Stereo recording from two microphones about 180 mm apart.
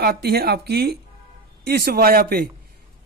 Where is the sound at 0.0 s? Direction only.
60° right (ahead or behind).